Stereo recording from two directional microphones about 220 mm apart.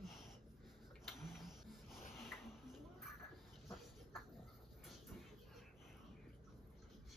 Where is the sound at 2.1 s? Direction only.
Centre (ahead or behind).